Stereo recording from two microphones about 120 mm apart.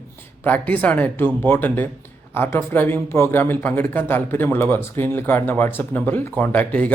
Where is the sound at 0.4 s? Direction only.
15° left (ahead or behind).